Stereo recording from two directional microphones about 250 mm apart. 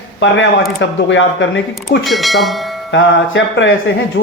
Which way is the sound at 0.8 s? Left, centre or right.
Left.